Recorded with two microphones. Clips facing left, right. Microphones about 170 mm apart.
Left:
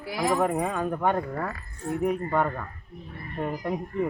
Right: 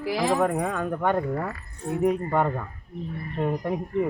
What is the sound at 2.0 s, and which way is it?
Speech, 20° right (ahead or behind).